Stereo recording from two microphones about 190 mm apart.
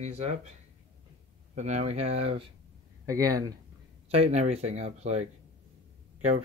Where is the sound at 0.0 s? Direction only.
35° right (ahead or behind).